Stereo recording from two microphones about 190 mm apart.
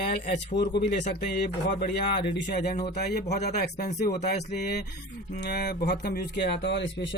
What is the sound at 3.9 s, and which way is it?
Speech, 55° left (ahead or behind).